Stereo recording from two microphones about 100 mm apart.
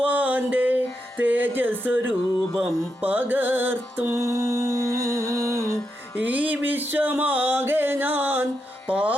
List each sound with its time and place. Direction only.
0.0 s music: 15° right (ahead or behind)
6.1 s music: 15° right (ahead or behind)